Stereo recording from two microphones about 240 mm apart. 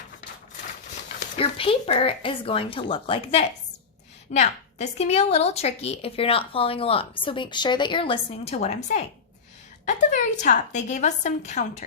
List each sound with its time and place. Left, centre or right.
1.4 s a woman's voice: left